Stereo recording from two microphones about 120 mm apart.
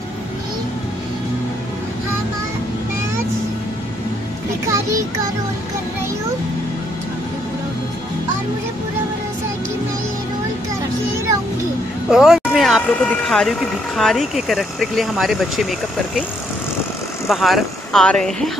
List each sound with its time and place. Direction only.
4.6 s child singing: 25° right (ahead or behind)
12.1 s speech: 5° right (ahead or behind)
17.3 s speech: centre (ahead or behind)